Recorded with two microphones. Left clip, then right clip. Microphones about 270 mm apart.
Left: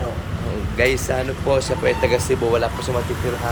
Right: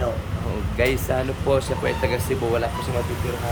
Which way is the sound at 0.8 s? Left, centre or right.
Centre.